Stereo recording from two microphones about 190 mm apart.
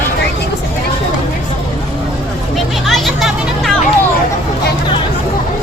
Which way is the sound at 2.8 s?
Centre (ahead or behind).